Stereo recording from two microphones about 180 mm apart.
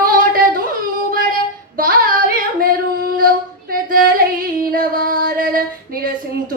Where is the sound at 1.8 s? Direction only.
50° right (ahead or behind).